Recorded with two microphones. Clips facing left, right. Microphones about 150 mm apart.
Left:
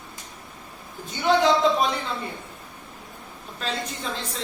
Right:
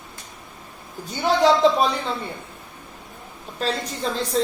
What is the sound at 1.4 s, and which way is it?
Speech, 35° right (ahead or behind).